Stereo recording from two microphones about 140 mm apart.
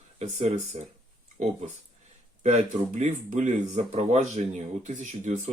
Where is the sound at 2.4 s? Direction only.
55° right (ahead or behind).